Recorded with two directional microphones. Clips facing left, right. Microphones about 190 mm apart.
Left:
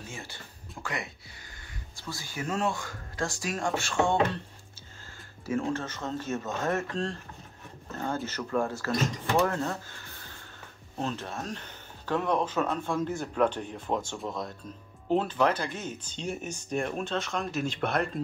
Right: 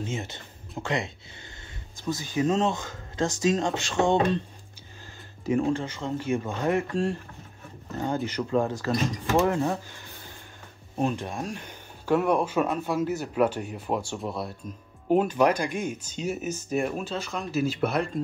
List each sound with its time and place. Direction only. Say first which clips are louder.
0.0 s speech: right 9 dB; 20° right (ahead or behind)
5.4 s speech: right 5 dB; 15° right (ahead or behind)